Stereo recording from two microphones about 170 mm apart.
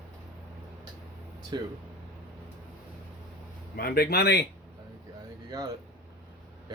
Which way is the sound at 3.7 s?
65° left (ahead or behind).